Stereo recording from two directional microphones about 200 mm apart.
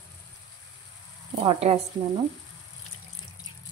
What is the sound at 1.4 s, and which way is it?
Speech, 30° right (ahead or behind).